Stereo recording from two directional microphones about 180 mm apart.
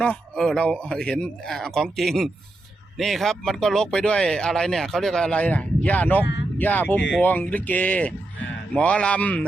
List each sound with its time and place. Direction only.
0.0 s speech: 5° left (ahead or behind)